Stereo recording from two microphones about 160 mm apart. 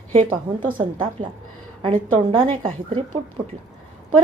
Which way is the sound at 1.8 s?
35° right (ahead or behind).